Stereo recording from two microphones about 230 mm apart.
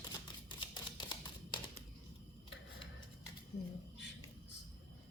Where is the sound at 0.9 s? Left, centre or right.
Centre.